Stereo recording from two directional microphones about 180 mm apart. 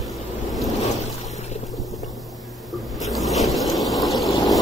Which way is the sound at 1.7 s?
Centre (ahead or behind).